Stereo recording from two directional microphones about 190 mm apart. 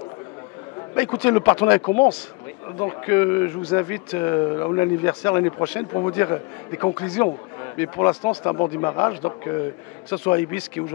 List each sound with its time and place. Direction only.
0.9 s speech: 15° left (ahead or behind)